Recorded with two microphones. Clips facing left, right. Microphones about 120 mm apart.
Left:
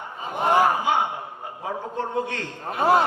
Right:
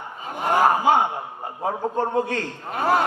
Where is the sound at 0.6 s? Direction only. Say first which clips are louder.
Right 3 dB; 40° right (ahead or behind).